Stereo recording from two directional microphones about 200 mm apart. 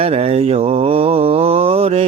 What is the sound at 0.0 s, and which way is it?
Mantra, 30° right (ahead or behind).